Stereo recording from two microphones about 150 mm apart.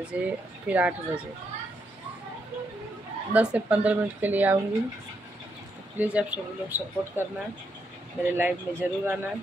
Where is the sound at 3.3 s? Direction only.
10° right (ahead or behind).